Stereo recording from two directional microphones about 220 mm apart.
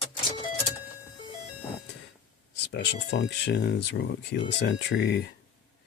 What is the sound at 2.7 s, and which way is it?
Speech, 50° left (ahead or behind).